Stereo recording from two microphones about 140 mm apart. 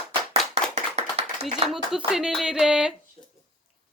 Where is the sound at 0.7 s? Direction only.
50° right (ahead or behind).